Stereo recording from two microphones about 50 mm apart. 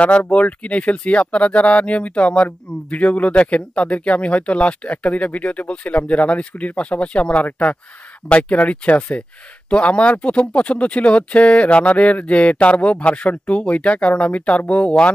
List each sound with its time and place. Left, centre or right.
0.0 s speech: left